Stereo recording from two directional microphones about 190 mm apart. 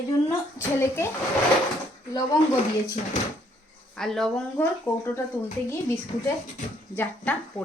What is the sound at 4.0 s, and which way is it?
Speech, centre (ahead or behind).